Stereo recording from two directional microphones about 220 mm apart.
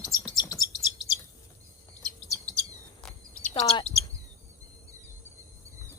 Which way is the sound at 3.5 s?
25° left (ahead or behind).